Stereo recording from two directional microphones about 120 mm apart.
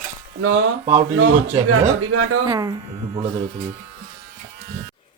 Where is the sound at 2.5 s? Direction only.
30° right (ahead or behind).